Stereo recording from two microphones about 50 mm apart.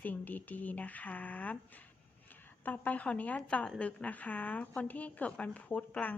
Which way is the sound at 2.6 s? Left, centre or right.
Left.